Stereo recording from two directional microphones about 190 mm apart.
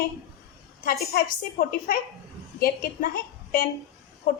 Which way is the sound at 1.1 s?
50° left (ahead or behind).